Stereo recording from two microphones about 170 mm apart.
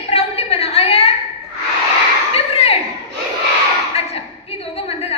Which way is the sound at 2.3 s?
35° left (ahead or behind).